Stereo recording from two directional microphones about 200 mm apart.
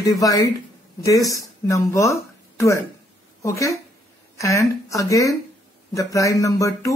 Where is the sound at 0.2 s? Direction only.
15° left (ahead or behind).